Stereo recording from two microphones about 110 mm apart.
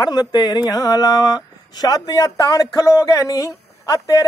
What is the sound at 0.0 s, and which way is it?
A man's voice, 40° left (ahead or behind).